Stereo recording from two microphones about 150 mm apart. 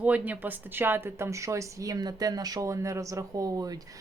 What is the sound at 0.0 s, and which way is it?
A woman's voice, 10° right (ahead or behind).